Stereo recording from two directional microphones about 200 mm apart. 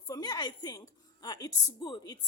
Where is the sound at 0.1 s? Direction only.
20° left (ahead or behind).